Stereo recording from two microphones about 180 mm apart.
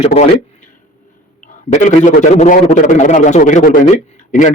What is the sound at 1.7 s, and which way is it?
A man's voice, 40° left (ahead or behind).